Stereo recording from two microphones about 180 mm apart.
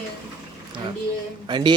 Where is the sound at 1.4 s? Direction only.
25° right (ahead or behind).